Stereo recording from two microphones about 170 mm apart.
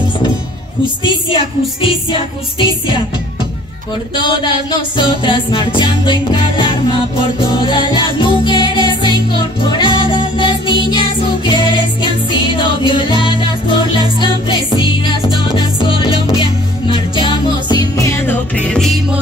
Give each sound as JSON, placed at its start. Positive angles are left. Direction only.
{"t": 1.0, "sound": "music", "side_deg": 30}
{"t": 4.2, "sound": "music", "side_deg": 25}